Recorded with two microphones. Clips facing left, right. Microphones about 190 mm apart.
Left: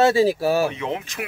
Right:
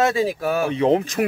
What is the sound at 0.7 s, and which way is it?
Speech, 35° right (ahead or behind).